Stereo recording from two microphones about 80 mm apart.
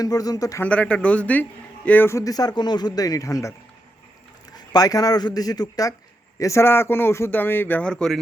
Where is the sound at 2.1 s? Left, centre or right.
Left.